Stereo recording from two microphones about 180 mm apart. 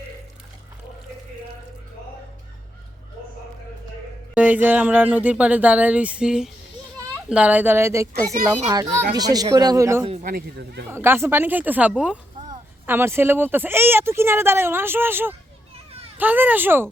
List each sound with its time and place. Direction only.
4.4 s speech: 10° right (ahead or behind)
10.2 s speech: 60° right (ahead or behind)
10.9 s speech: 15° right (ahead or behind)